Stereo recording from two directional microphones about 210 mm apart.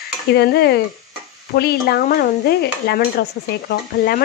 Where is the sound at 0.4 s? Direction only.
50° left (ahead or behind).